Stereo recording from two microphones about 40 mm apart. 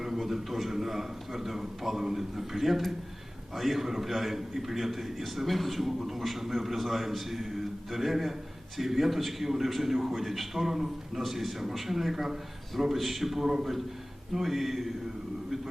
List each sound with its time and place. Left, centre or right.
0.0 s a man's voice: centre